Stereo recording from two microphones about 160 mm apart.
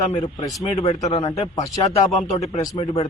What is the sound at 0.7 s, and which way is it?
A man's voice, 40° left (ahead or behind).